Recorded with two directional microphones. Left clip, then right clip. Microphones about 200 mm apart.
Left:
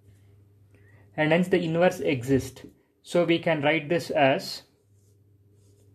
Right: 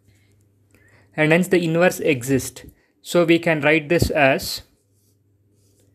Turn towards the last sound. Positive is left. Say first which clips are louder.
# right 5 dB
turn(degrees=-25)  # may be behind; listen again after turning